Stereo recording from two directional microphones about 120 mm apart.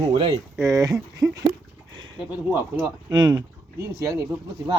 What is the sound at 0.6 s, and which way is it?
Speech, 25° right (ahead or behind).